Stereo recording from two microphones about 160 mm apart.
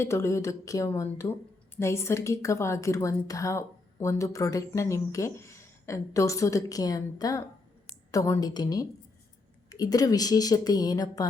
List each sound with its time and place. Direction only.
0.0 s a woman's voice: 15° left (ahead or behind)